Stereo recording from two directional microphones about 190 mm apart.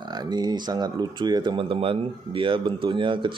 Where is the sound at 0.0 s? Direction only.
20° right (ahead or behind).